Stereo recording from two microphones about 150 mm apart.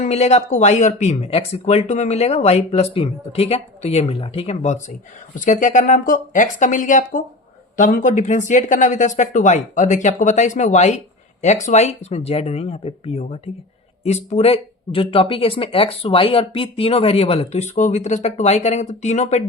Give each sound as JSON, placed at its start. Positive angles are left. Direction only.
{"t": 0.0, "sound": "speech", "side_deg": 45}